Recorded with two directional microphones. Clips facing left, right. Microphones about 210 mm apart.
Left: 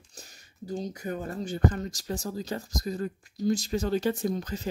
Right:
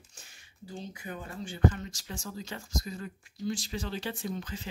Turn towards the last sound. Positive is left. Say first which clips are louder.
# left 6 dB
turn(degrees=40)  # may be behind; listen again after turning